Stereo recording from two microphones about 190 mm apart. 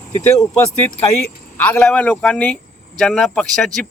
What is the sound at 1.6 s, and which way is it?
Speech, 10° left (ahead or behind).